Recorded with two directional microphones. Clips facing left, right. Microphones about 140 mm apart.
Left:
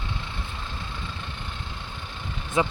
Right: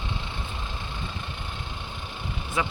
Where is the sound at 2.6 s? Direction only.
20° left (ahead or behind).